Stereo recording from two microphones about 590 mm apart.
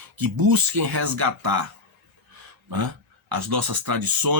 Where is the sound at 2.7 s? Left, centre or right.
Right.